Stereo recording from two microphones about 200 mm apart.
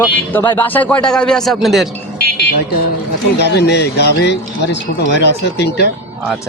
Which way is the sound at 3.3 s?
55° left (ahead or behind).